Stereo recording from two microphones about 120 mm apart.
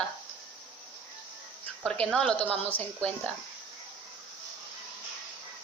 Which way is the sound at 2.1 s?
5° left (ahead or behind).